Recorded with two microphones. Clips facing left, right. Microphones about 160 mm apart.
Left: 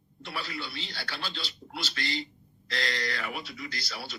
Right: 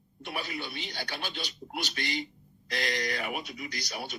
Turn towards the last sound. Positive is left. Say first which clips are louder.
# right 2 dB
turn(degrees=-20)  # may be behind; listen again after turning